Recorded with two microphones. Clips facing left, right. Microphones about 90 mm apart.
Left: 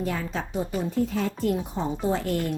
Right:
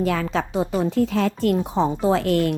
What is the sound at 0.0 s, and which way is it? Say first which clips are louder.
A woman's voice: right 7 dB; 90° right.